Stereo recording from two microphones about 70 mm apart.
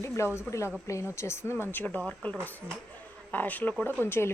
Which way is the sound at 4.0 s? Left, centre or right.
Left.